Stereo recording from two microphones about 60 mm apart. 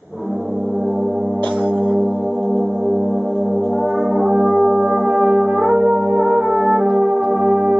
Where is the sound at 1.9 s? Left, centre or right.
Centre.